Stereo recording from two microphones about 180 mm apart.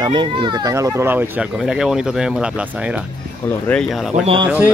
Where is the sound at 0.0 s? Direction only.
25° right (ahead or behind).